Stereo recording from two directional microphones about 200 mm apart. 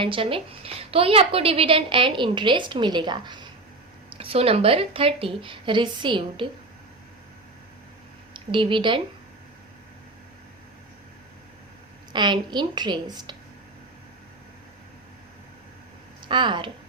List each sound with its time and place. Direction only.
0.0 s a woman's voice: 25° right (ahead or behind)
8.3 s a woman's voice: 25° right (ahead or behind)
12.1 s a woman's voice: 20° right (ahead or behind)
16.3 s a woman's voice: 25° right (ahead or behind)